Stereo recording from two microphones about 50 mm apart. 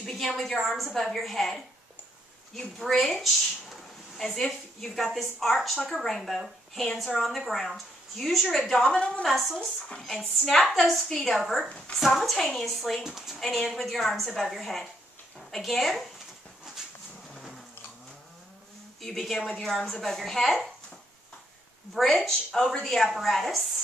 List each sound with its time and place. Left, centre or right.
0.0 s a woman's voice: centre
8.9 s a woman's voice: left
9.2 s a woman's voice: centre
9.8 s speech: centre
10.7 s a woman's voice: centre
17.3 s a sound: centre
18.9 s a woman's voice: centre
21.9 s a woman's voice: centre